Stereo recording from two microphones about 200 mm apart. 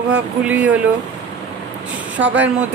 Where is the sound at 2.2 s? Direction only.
70° right (ahead or behind).